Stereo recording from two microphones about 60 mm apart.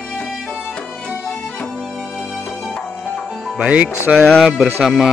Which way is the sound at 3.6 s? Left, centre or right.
Right.